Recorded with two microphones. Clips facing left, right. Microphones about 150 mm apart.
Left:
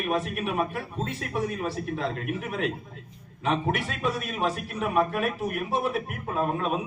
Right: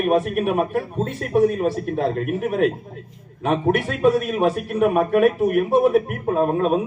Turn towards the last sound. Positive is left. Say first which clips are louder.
# right 8 dB
turn(degrees=-45)  # may be behind; listen again after turning